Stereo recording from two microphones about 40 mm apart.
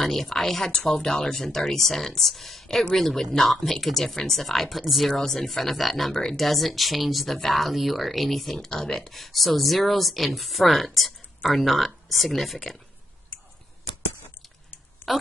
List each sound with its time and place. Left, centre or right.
0.0 s speech: centre
8.5 s speech: centre
15.0 s a sound: left